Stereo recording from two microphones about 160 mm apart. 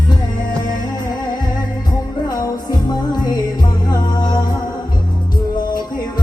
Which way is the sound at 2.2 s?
25° left (ahead or behind).